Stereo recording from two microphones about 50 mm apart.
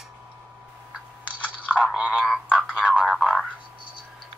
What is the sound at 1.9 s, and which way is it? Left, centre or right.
Frog, right.